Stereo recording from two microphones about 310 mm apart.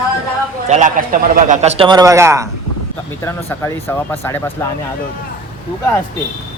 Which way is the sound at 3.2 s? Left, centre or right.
Centre.